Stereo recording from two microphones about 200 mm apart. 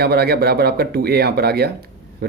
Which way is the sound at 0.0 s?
55° right (ahead or behind).